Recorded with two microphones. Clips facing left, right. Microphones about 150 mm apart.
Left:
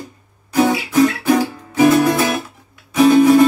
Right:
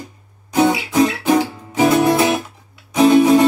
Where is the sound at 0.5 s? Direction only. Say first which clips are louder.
Even; 20° right (ahead or behind).